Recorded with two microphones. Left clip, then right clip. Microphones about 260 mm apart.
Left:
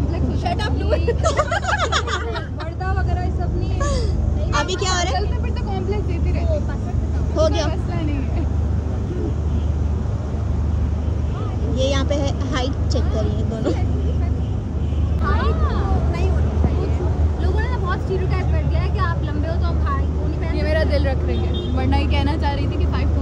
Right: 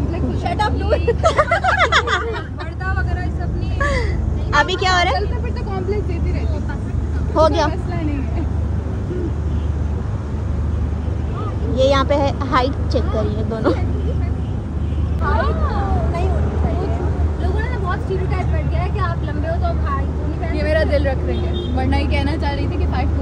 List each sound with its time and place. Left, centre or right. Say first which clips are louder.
0.8 s speech: right 1 dB; centre
1.2 s speech: right 5 dB; left
4.5 s speech: right 6 dB; left
7.3 s speech: right 5 dB; centre
11.7 s speech: right 7 dB; centre
20.5 s speech: right 4 dB; left
21.7 s speech: right 2 dB; centre